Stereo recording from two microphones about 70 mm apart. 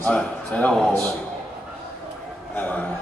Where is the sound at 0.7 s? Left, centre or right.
Centre.